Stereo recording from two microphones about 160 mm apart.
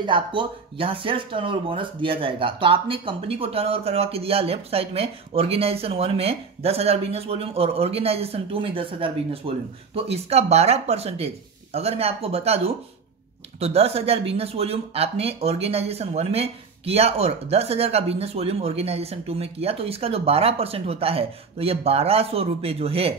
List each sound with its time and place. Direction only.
0.0 s speech: 30° right (ahead or behind)